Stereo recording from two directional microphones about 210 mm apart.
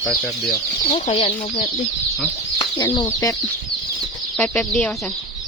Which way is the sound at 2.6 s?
20° left (ahead or behind).